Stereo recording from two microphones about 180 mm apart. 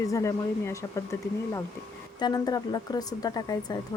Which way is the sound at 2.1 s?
25° left (ahead or behind).